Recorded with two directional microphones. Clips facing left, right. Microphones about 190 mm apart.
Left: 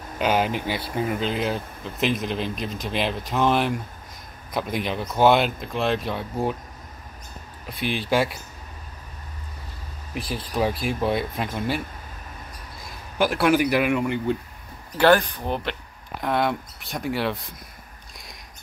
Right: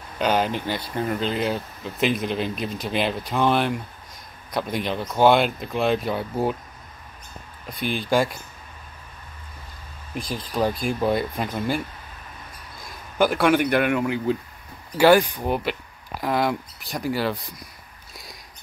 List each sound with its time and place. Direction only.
0.2 s speech: 5° left (ahead or behind)
7.7 s speech: centre (ahead or behind)
10.1 s speech: 5° left (ahead or behind)
13.2 s speech: centre (ahead or behind)
18.1 s a sound: centre (ahead or behind)